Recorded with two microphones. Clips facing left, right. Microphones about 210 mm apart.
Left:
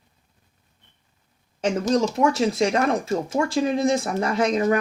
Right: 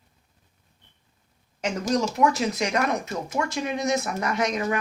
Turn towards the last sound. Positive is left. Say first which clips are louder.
# left 5 dB
turn(degrees=30)  # may be behind; listen again after turning